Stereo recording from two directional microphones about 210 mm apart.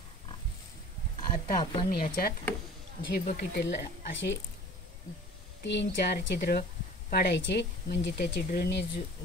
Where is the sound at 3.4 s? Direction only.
50° left (ahead or behind).